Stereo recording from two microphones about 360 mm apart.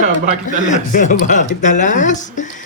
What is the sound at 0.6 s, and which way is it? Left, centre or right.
A woman's voice, left.